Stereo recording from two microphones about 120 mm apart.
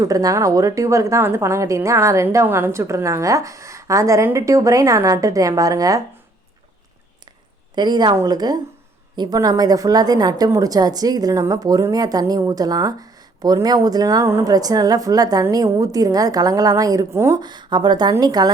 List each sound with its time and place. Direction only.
0.0 s a woman's voice: 30° right (ahead or behind)
7.8 s a woman's voice: 35° right (ahead or behind)
17.3 s a woman's voice: 35° right (ahead or behind)